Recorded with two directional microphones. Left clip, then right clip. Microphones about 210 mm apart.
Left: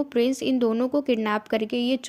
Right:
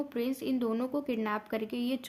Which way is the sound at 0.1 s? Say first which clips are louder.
Left 10 dB; 30° left (ahead or behind).